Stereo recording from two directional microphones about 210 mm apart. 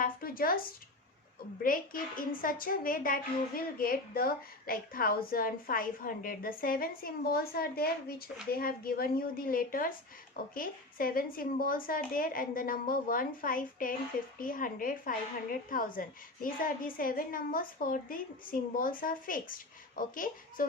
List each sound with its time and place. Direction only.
0.0 s a woman's voice: 45° left (ahead or behind)
1.6 s a woman's voice: 40° left (ahead or behind)